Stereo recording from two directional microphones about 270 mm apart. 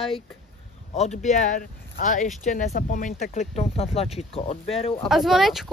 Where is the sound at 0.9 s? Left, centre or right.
Left.